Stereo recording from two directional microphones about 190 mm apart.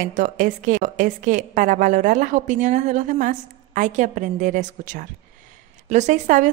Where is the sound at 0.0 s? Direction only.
40° right (ahead or behind).